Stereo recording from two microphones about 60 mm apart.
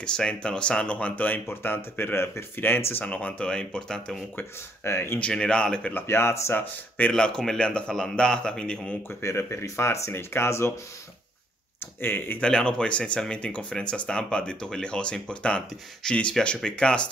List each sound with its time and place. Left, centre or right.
0.0 s speech: centre; by 3.1 s left
3.1 s speech: left
4.4 s speech: left
5.2 s speech: centre
5.9 s speech: left
7.1 s speech: centre
9.2 s speech: left
12.0 s speech: left
12.4 s speech: centre